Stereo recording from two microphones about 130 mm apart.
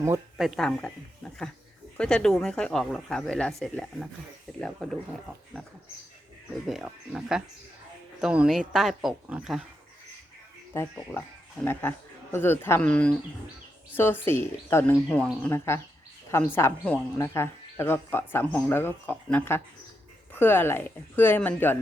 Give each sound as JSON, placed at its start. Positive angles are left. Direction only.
{"t": 0.3, "sound": "speech", "side_deg": 0}
{"t": 2.0, "sound": "speech", "side_deg": 5}
{"t": 6.7, "sound": "speech", "side_deg": -5}
{"t": 10.8, "sound": "speech", "side_deg": 20}